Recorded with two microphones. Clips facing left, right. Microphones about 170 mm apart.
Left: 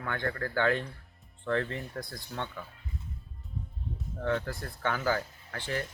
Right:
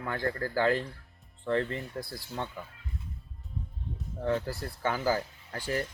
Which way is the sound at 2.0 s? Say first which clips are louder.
Right 1 dB; 5° right (ahead or behind).